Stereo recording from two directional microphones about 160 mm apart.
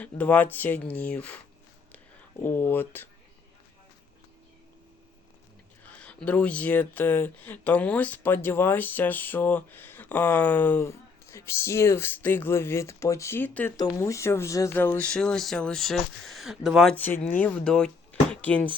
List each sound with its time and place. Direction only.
0.0 s speech: 10° left (ahead or behind)
2.4 s speech: 15° left (ahead or behind)
5.8 s speech: 10° left (ahead or behind)
13.7 s speech: 25° left (ahead or behind); by 16.9 s centre (ahead or behind)
16.9 s speech: 10° left (ahead or behind)